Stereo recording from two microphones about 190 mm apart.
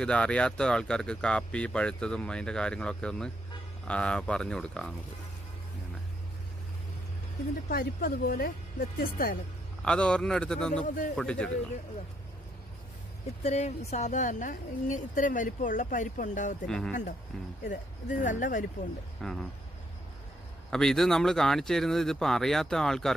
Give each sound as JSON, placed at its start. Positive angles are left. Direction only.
{"t": 0.0, "sound": "speech", "side_deg": 5}
{"t": 7.7, "sound": "speech", "side_deg": 55}
{"t": 9.8, "sound": "speech", "side_deg": 5}
{"t": 13.4, "sound": "a woman's voice", "side_deg": 35}
{"t": 16.6, "sound": "speech", "side_deg": 5}
{"t": 17.6, "sound": "a woman's voice", "side_deg": 40}
{"t": 19.2, "sound": "speech", "side_deg": 5}
{"t": 20.7, "sound": "speech", "side_deg": 5}